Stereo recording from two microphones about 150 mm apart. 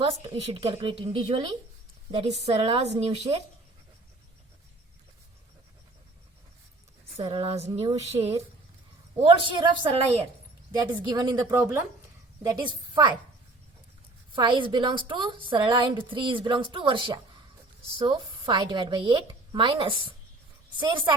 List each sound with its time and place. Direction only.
0.0 s a woman's voice: 35° right (ahead or behind)
2.1 s a woman's voice: 45° right (ahead or behind)
7.2 s a woman's voice: 35° right (ahead or behind)
11.5 s a woman's voice: 15° right (ahead or behind); by 13.1 s 30° right (ahead or behind)
14.3 s a woman's voice: 35° right (ahead or behind)